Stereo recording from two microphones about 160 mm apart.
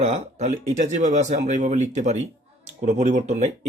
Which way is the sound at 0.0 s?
45° right (ahead or behind).